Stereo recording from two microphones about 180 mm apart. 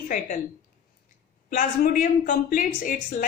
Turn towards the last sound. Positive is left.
turn(degrees=50)  # may be behind; listen again after turning